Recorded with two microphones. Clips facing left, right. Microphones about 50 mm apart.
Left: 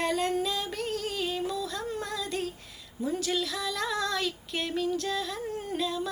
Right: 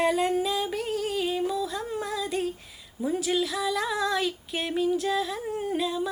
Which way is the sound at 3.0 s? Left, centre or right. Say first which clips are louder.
Right 3 dB; centre.